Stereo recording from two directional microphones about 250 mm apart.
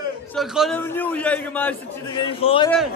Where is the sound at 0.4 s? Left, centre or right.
Centre.